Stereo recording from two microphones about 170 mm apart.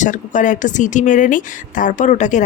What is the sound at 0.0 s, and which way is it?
Speech, 45° left (ahead or behind).